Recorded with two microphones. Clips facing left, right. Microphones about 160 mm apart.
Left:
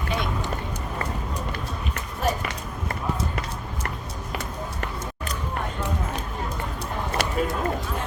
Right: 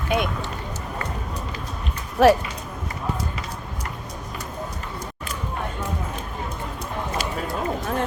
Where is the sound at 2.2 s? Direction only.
75° right (ahead or behind).